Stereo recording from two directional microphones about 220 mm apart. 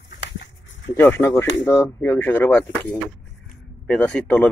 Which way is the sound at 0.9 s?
10° left (ahead or behind).